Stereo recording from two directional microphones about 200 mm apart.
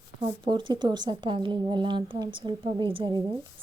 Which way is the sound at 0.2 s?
25° right (ahead or behind).